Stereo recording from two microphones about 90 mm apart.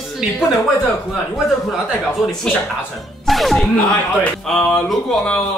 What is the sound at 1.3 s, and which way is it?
Speech, centre (ahead or behind).